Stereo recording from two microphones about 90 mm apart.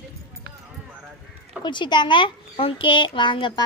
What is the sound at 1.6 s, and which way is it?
A child's voice, 60° left (ahead or behind).